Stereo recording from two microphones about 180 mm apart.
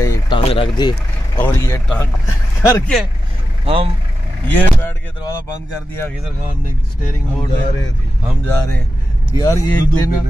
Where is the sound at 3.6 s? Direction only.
30° right (ahead or behind).